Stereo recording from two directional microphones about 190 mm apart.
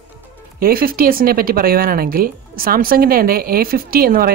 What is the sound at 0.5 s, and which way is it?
Speech, 50° right (ahead or behind).